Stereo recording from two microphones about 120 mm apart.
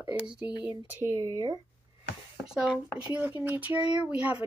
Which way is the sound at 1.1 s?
30° right (ahead or behind).